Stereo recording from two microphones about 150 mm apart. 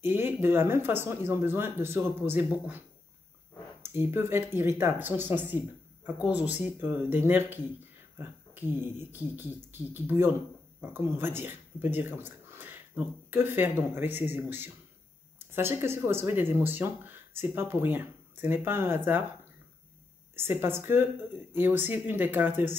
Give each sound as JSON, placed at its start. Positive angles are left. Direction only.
{"t": 0.0, "sound": "speech", "side_deg": -15}
{"t": 3.8, "sound": "speech", "side_deg": -15}
{"t": 20.3, "sound": "speech", "side_deg": -15}